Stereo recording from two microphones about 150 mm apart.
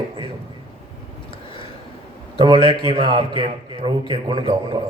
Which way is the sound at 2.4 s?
40° right (ahead or behind).